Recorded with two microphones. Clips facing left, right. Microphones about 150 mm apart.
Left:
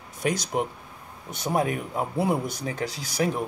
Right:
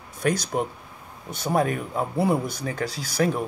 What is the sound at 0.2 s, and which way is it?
Speech, 20° left (ahead or behind).